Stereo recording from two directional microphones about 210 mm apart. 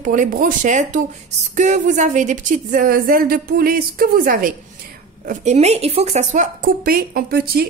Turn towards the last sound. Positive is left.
turn(degrees=-45)  # may be behind; listen again after turning